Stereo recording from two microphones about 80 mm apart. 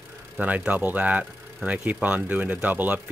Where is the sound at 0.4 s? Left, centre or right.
Centre.